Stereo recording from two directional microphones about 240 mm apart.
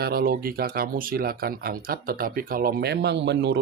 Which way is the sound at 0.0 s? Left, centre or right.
Right.